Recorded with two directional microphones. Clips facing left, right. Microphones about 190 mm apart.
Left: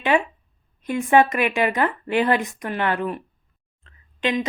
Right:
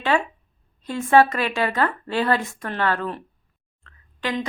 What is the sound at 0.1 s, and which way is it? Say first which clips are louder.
Speech: left 2 dB; 15° left (ahead or behind).